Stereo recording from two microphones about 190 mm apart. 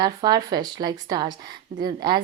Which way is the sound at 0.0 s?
20° right (ahead or behind).